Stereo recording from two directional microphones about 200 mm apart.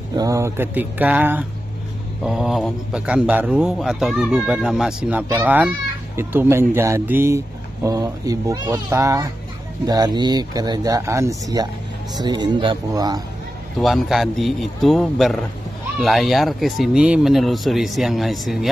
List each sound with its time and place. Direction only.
0.2 s a man's voice: 15° right (ahead or behind)
13.7 s a man's voice: centre (ahead or behind)